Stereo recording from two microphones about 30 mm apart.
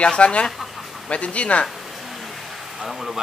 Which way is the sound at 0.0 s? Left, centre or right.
Left.